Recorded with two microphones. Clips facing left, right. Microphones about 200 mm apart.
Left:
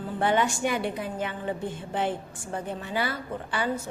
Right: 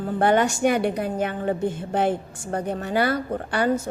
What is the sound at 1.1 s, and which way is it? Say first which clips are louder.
A woman's voice: right 6 dB; 50° right (ahead or behind).